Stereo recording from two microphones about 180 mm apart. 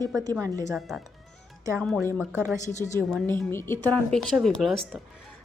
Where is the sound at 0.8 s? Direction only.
Centre (ahead or behind).